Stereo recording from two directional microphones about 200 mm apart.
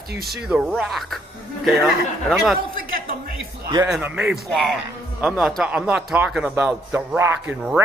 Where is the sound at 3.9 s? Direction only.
5° right (ahead or behind).